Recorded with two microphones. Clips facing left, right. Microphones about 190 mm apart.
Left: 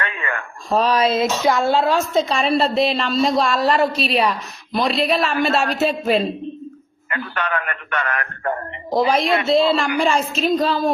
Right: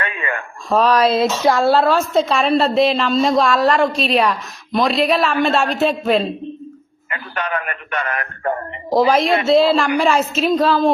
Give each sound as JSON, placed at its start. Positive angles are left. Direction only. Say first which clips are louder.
{"t": 0.0, "sound": "radio", "louder": "right 2 dB", "side_deg": -20}
{"t": 0.7, "sound": "a woman's voice", "louder": "right 3 dB", "side_deg": 0}
{"t": 1.1, "sound": "speech", "louder": "right 2 dB", "side_deg": -30}
{"t": 1.8, "sound": "a woman's voice", "louder": "right 2 dB", "side_deg": 0}
{"t": 7.1, "sound": "a man's voice", "louder": "even", "side_deg": -15}
{"t": 8.9, "sound": "a woman's voice", "louder": "right 3 dB", "side_deg": 0}